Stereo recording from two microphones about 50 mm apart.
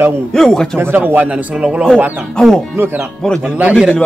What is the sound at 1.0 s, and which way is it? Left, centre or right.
Speech, right.